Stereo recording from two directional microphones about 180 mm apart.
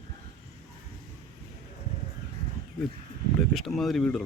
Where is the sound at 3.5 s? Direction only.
Centre (ahead or behind).